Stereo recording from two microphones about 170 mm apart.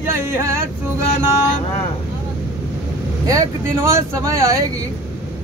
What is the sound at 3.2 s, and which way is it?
Speech, 20° right (ahead or behind).